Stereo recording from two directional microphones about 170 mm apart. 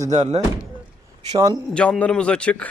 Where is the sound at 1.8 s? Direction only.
5° left (ahead or behind).